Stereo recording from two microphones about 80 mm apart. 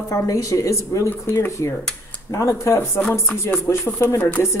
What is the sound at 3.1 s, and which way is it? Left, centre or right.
Music, left.